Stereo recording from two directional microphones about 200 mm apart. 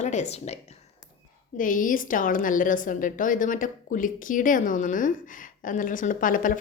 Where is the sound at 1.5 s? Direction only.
40° left (ahead or behind).